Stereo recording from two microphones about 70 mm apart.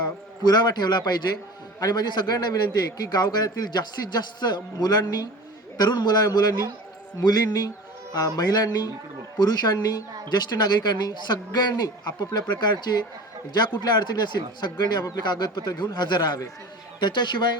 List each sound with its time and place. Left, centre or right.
0.0 s a man's voice: left
1.8 s a man's voice: left
7.3 s a man's voice: left